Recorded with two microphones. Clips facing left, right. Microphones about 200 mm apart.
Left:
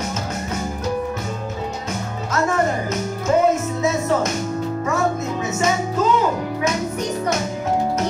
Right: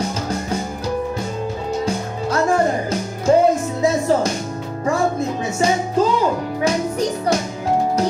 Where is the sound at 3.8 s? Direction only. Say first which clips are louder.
Right 5 dB; 30° right (ahead or behind).